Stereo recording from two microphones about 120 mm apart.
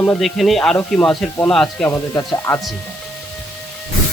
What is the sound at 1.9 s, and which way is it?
Speech, 20° left (ahead or behind).